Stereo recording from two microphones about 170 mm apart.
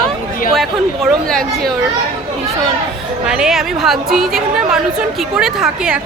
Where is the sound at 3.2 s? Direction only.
5° right (ahead or behind).